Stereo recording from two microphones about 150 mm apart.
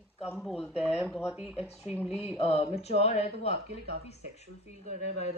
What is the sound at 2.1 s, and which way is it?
Speech, 40° left (ahead or behind).